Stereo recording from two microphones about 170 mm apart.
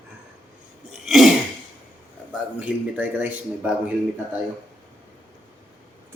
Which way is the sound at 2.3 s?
10° right (ahead or behind).